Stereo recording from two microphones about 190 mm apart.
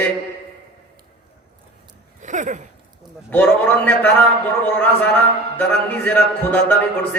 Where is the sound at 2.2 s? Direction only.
40° right (ahead or behind).